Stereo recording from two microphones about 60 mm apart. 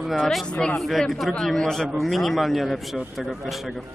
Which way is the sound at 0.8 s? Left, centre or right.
Centre.